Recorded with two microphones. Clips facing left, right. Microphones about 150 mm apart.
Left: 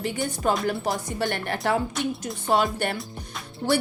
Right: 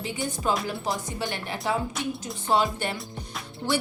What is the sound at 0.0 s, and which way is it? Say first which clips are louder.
A woman's voice: left 3 dB; 55° left (ahead or behind).